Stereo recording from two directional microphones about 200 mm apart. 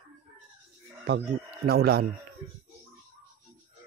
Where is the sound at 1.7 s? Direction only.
50° right (ahead or behind).